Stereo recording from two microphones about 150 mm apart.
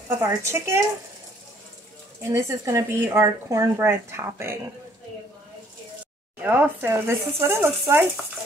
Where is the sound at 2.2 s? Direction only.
20° right (ahead or behind).